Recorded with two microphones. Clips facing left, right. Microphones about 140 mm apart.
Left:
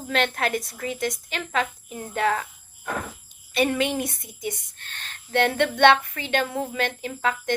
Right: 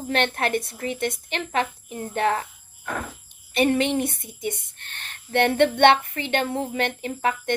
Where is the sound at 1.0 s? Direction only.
60° right (ahead or behind).